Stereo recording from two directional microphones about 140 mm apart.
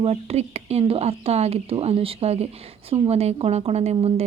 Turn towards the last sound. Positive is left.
turn(degrees=-45)  # may be behind; listen again after turning